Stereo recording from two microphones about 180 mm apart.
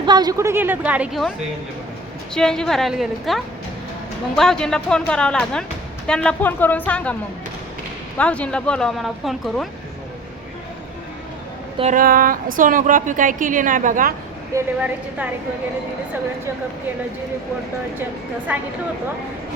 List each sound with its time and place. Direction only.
0.0 s a woman's voice: 25° right (ahead or behind); by 1.3 s 5° right (ahead or behind)
2.3 s a woman's voice: 5° left (ahead or behind)
8.2 s speech: 5° left (ahead or behind)
11.8 s a woman's voice: 45° right (ahead or behind)
14.5 s a woman's voice: 10° right (ahead or behind)
18.5 s a woman's voice: 10° right (ahead or behind)